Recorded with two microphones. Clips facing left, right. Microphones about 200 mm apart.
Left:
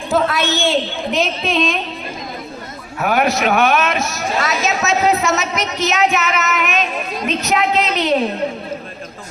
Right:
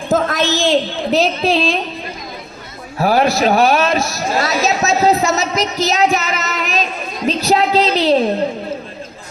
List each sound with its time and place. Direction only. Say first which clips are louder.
0.1 s a woman's voice: right 1 dB; 40° right (ahead or behind)
3.0 s a woman's voice: right 3 dB; 30° right (ahead or behind)